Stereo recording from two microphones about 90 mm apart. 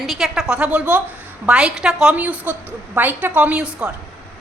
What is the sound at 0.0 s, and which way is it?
A woman's voice, 5° right (ahead or behind).